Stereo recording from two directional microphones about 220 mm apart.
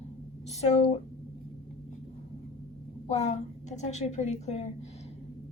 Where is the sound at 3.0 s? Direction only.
30° left (ahead or behind).